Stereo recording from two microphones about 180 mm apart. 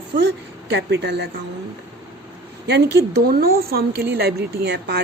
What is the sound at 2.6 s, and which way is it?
A woman's voice, 70° right (ahead or behind).